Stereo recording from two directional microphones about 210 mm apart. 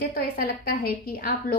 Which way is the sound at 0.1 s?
45° left (ahead or behind).